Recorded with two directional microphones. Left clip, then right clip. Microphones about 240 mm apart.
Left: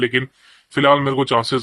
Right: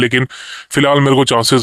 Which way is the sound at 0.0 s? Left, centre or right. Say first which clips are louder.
Right 5 dB; right.